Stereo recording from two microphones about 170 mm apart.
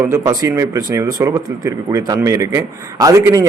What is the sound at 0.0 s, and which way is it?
A man's voice, 15° right (ahead or behind).